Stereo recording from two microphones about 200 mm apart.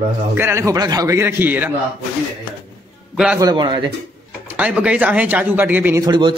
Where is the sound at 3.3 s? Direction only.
20° right (ahead or behind).